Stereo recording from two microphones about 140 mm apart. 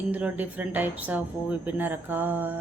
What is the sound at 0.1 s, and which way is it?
Speech, 10° right (ahead or behind).